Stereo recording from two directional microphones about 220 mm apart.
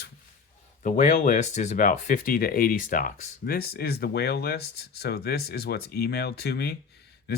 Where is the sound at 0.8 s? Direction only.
35° left (ahead or behind).